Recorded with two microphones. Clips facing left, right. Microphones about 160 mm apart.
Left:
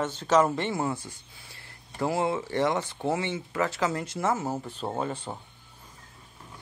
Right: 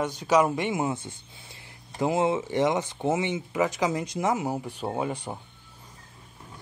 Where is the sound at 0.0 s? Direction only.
15° right (ahead or behind).